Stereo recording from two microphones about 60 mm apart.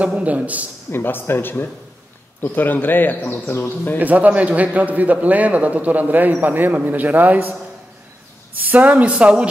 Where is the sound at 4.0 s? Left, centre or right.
Right.